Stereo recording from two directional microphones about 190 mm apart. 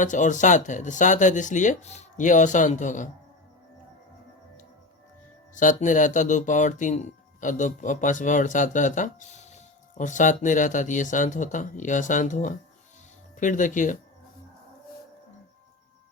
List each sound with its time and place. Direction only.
0.0 s speech: 40° left (ahead or behind)
5.5 s speech: 40° left (ahead or behind)